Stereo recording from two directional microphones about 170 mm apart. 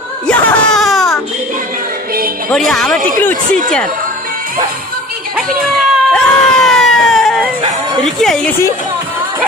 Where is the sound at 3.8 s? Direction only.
55° right (ahead or behind).